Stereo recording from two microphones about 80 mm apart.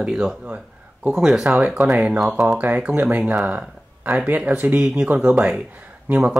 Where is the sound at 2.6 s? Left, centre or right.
Centre.